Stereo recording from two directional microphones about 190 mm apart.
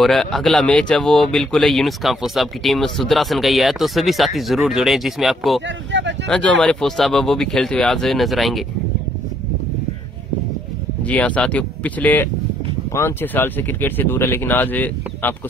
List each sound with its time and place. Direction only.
0.0 s speech: centre (ahead or behind)
5.9 s vehicle: 70° right (ahead or behind)
6.2 s speech: 5° left (ahead or behind)
11.1 s speech: 5° left (ahead or behind)